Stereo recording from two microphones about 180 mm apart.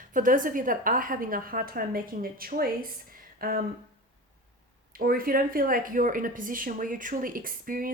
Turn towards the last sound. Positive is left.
turn(degrees=-50)  # may be behind; listen again after turning